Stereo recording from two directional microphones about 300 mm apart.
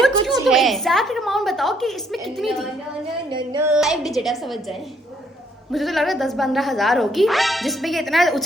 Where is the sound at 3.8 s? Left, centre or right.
Centre.